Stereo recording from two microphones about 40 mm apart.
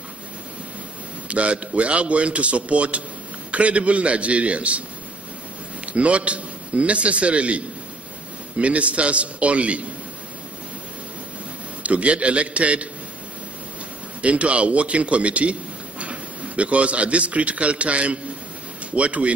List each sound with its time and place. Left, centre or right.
1.3 s a man's voice: right
5.9 s a man's voice: right
11.8 s a man's voice: right
14.2 s a man's voice: right